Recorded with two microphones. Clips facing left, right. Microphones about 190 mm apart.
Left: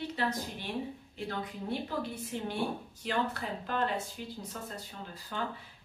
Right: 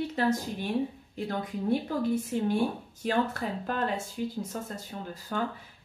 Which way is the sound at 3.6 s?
45° right (ahead or behind).